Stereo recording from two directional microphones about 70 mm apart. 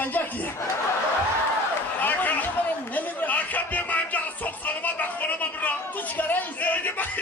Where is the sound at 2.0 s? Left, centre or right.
Left.